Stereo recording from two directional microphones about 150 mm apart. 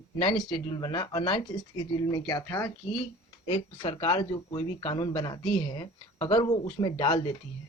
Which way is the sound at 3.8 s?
35° left (ahead or behind).